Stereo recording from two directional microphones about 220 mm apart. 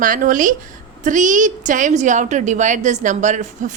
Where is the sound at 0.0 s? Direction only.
35° right (ahead or behind).